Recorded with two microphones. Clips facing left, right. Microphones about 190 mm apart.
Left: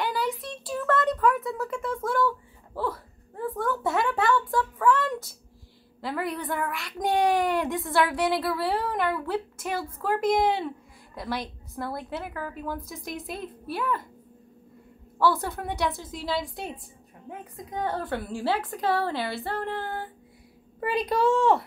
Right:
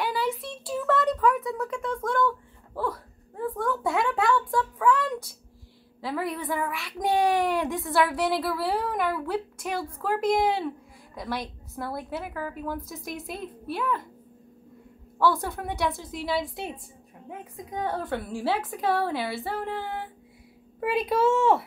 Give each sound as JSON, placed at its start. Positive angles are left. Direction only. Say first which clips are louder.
{"t": 0.0, "sound": "a sound", "louder": "right 1 dB", "side_deg": 0}
{"t": 5.9, "sound": "a woman's voice", "louder": "even", "side_deg": 0}
{"t": 15.1, "sound": "a woman's voice", "louder": "even", "side_deg": 0}